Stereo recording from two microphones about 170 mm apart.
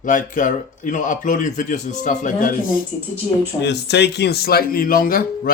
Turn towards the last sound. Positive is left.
turn(degrees=60)  # may be behind; listen again after turning